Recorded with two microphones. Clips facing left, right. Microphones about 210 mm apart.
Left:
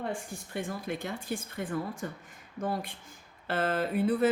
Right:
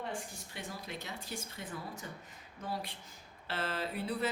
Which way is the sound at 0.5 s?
50° left (ahead or behind).